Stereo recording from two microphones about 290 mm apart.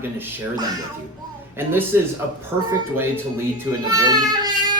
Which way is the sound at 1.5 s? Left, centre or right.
Centre.